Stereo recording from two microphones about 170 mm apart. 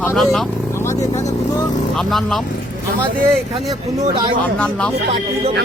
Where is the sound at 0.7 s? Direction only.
15° left (ahead or behind).